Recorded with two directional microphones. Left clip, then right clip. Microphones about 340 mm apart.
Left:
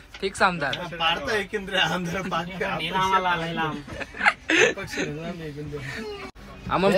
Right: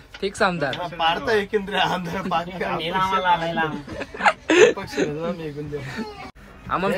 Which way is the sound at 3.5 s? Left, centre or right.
Centre.